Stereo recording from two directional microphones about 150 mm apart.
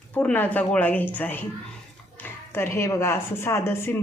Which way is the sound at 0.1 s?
10° left (ahead or behind).